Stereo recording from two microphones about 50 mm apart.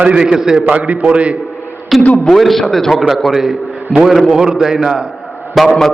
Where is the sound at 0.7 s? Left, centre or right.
Right.